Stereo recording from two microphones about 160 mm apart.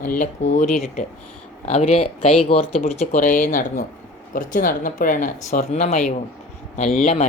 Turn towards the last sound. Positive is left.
turn(degrees=45)  # may be behind; listen again after turning